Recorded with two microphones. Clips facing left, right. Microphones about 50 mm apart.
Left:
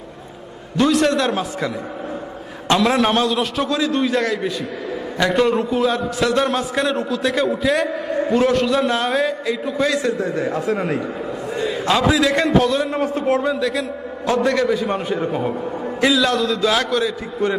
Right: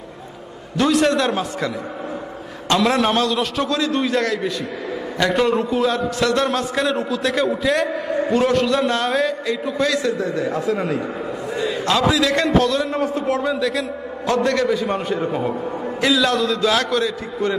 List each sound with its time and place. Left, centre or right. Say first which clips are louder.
0.8 s a man's voice: even; centre
2.7 s a man's voice: left 1 dB; centre
10.0 s a man's voice: even; left
10.2 s a man's voice: even; left
11.9 s a man's voice: left 1 dB; centre
13.0 s a man's voice: left 2 dB; left
13.4 s a man's voice: even; centre